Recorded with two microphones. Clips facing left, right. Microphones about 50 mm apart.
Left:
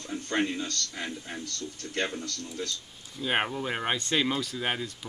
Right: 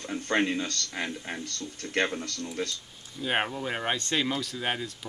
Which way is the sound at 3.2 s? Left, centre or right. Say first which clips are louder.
Even; centre.